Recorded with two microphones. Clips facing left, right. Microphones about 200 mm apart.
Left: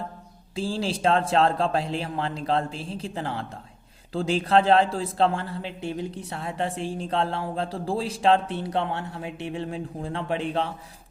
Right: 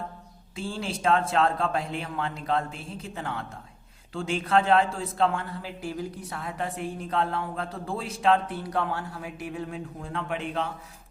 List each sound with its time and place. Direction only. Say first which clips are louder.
0.5 s speech: left 5 dB; 30° left (ahead or behind)